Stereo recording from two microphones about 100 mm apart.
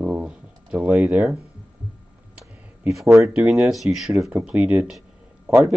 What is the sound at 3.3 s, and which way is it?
Speech, 10° right (ahead or behind).